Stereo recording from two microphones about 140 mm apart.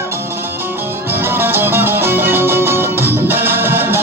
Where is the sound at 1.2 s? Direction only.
15° right (ahead or behind).